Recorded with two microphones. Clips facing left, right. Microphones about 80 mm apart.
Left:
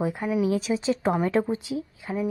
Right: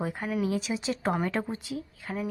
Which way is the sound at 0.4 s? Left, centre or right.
Left.